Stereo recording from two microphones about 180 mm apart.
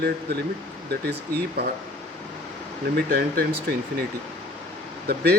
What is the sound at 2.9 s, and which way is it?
Speech, 60° right (ahead or behind).